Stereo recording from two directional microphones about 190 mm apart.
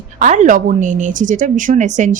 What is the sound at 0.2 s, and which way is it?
A woman's voice, 40° right (ahead or behind).